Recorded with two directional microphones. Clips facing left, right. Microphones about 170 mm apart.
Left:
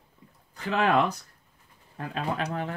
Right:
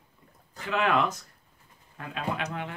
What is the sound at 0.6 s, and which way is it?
Speech, 35° left (ahead or behind).